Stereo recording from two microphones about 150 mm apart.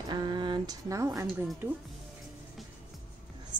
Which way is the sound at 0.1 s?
30° right (ahead or behind).